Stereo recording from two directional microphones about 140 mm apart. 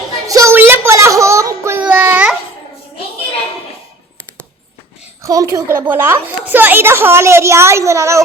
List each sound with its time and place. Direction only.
0.3 s a sound: 25° right (ahead or behind)
1.8 s child singing: 10° right (ahead or behind)
5.2 s a woman's voice: 25° right (ahead or behind)